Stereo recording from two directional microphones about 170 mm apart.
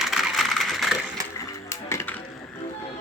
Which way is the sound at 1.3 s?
15° left (ahead or behind).